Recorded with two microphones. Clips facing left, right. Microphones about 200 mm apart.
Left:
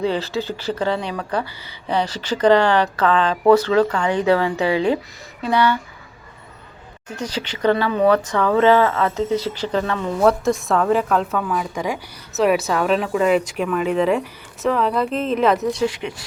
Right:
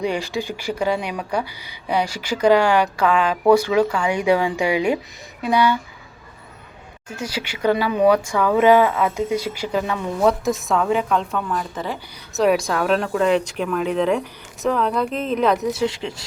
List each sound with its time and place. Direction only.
0.0 s speech: 15° right (ahead or behind)
7.1 s speech: 10° right (ahead or behind)
10.2 s speech: centre (ahead or behind)
15.8 s speech: 25° right (ahead or behind)